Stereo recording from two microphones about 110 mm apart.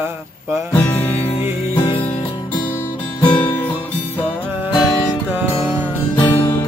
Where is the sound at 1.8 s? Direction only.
50° left (ahead or behind).